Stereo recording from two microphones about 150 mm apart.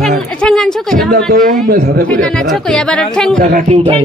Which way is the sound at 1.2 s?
75° right (ahead or behind).